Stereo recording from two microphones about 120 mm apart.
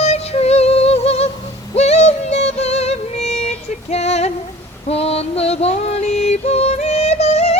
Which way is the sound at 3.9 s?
65° left (ahead or behind).